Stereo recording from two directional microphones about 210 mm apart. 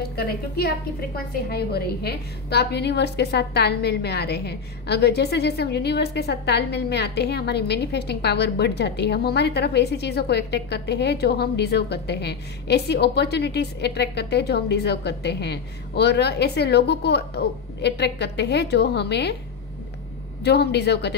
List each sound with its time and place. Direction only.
0.1 s a woman's voice: 45° left (ahead or behind)
20.4 s a woman's voice: 50° left (ahead or behind)